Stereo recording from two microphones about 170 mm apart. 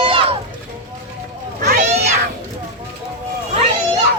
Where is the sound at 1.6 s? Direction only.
45° right (ahead or behind).